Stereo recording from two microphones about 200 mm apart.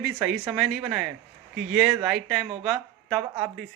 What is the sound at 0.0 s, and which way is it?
A woman's voice, centre (ahead or behind).